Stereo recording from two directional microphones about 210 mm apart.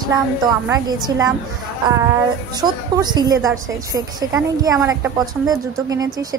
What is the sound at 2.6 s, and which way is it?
A woman's voice, 20° right (ahead or behind).